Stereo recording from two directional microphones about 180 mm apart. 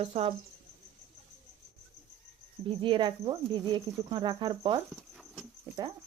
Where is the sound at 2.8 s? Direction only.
25° right (ahead or behind).